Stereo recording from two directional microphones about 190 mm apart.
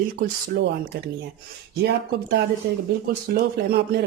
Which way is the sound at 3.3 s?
55° right (ahead or behind).